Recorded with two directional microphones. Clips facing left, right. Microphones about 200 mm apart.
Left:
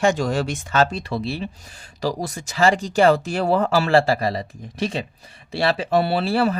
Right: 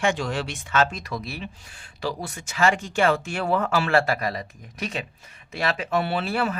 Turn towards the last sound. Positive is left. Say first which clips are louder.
# left 5 dB
turn(degrees=35)  # may be behind; listen again after turning